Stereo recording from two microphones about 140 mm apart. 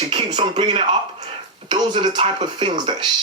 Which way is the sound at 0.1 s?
35° right (ahead or behind).